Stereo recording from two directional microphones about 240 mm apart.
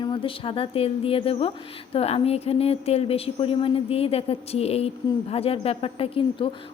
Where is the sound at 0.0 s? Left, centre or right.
Left.